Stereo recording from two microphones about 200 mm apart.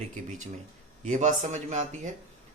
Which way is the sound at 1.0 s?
40° right (ahead or behind).